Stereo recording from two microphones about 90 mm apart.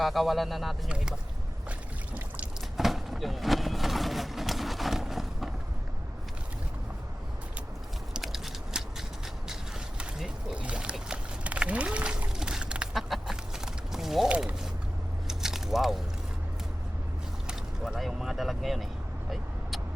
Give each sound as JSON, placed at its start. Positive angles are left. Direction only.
{"t": 0.0, "sound": "speech", "side_deg": 0}
{"t": 2.1, "sound": "boat", "side_deg": -20}
{"t": 2.7, "sound": "vehicle", "side_deg": 0}
{"t": 8.1, "sound": "biting", "side_deg": -5}
{"t": 10.0, "sound": "a sound", "side_deg": -10}
{"t": 13.0, "sound": "chicken", "side_deg": 0}
{"t": 13.9, "sound": "mechanisms", "side_deg": -5}
{"t": 14.3, "sound": "speech", "side_deg": -10}
{"t": 15.3, "sound": "biting", "side_deg": -5}
{"t": 17.4, "sound": "vehicle", "side_deg": 0}